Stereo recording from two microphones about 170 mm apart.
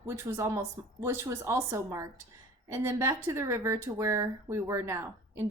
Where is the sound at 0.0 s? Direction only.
15° right (ahead or behind).